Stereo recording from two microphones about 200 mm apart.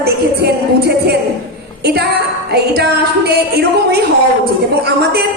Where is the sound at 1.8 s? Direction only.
55° right (ahead or behind).